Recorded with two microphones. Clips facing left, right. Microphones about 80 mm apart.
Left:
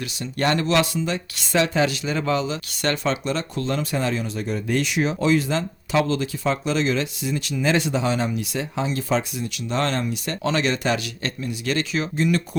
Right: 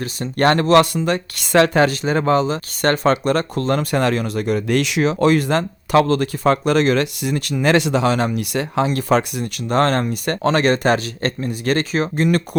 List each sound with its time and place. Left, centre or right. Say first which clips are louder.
0.0 s speech: right 7 dB; right